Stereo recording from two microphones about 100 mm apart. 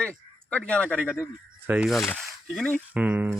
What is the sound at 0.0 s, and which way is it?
A man's voice, 10° left (ahead or behind).